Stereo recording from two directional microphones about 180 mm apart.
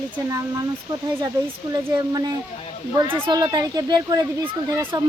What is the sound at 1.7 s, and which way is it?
Speech, 20° right (ahead or behind).